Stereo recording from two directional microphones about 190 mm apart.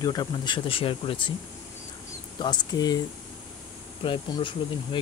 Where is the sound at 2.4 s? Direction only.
20° left (ahead or behind).